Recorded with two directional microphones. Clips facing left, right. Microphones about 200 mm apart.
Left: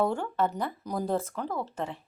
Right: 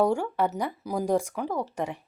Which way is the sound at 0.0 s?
10° right (ahead or behind).